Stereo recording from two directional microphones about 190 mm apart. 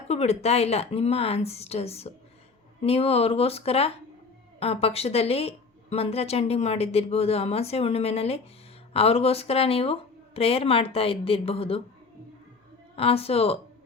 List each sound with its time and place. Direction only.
0.1 s a woman's voice: 35° left (ahead or behind)
13.0 s a woman's voice: 30° left (ahead or behind)